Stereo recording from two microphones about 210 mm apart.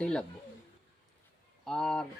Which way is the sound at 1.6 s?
5° left (ahead or behind).